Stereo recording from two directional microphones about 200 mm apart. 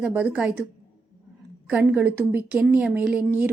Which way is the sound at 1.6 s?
5° right (ahead or behind).